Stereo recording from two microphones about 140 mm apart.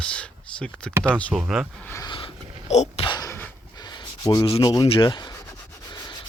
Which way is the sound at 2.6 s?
55° left (ahead or behind).